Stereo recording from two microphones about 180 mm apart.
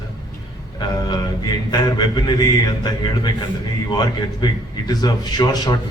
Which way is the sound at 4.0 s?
25° left (ahead or behind).